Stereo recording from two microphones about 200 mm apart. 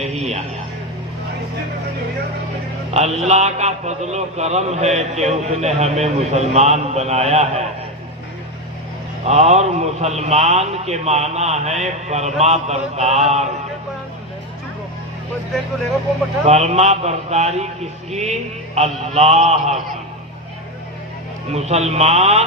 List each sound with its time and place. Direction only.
0.0 s a man's voice: 35° right (ahead or behind)
2.9 s a man's voice: 35° right (ahead or behind)
9.2 s a man's voice: 35° right (ahead or behind)
16.5 s a man's voice: 35° right (ahead or behind)
21.5 s a man's voice: 35° right (ahead or behind)